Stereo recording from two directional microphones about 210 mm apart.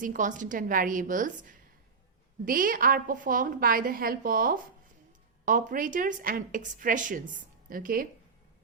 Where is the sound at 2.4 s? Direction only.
40° right (ahead or behind).